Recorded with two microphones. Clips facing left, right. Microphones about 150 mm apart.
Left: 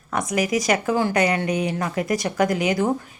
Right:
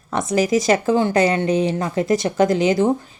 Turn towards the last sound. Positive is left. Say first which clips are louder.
# right 4 dB
turn(degrees=-25)  # may be behind; listen again after turning